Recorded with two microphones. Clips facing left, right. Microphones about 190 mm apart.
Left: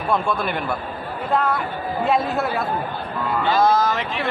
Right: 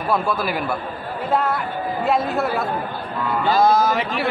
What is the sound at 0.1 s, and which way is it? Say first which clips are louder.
Speech: even; 5° right (ahead or behind).